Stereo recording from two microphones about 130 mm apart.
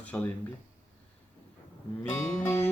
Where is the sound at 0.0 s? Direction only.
10° left (ahead or behind).